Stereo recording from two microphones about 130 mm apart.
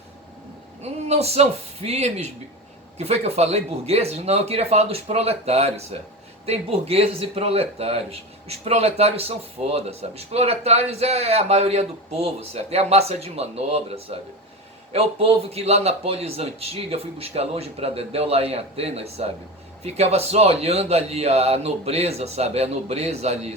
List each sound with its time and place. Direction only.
0.8 s a man's voice: 55° right (ahead or behind)